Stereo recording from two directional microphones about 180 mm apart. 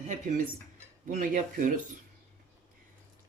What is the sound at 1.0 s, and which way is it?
Speech, 50° right (ahead or behind).